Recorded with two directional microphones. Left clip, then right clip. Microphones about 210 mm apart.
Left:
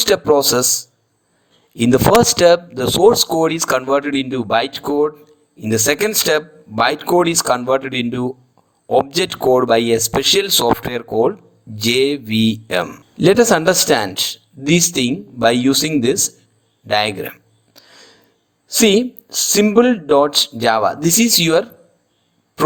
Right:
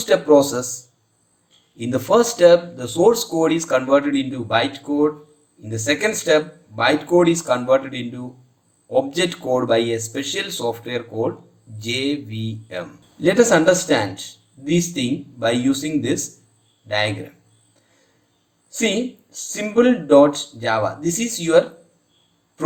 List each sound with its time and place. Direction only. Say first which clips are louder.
0.0 s a man's voice: left 1 dB; 50° left (ahead or behind)
17.7 s music: left 17 dB; 50° left (ahead or behind)
18.7 s a man's voice: left 8 dB; 50° left (ahead or behind)